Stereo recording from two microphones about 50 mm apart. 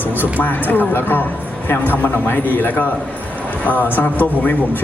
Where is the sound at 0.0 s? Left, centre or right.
Left.